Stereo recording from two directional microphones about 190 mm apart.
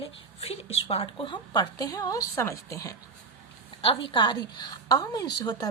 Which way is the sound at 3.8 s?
30° left (ahead or behind).